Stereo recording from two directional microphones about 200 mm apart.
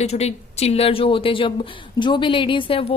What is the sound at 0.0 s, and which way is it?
A woman's voice, 30° left (ahead or behind).